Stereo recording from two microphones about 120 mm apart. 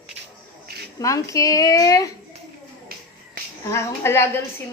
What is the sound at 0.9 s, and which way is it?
A woman's voice, 25° left (ahead or behind).